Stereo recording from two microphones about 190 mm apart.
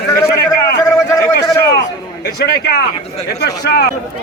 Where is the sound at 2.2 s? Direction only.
55° left (ahead or behind).